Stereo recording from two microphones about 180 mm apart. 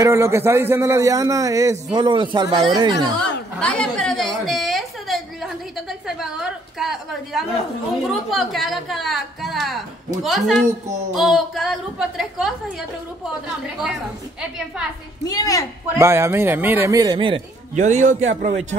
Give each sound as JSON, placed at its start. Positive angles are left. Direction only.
{"t": 0.0, "sound": "a man's voice", "side_deg": -15}
{"t": 3.2, "sound": "a sound", "side_deg": 5}
{"t": 8.1, "sound": "a woman's voice", "side_deg": 0}
{"t": 15.2, "sound": "a woman's voice", "side_deg": 20}
{"t": 16.0, "sound": "a man's voice", "side_deg": -15}
{"t": 17.7, "sound": "speech", "side_deg": -40}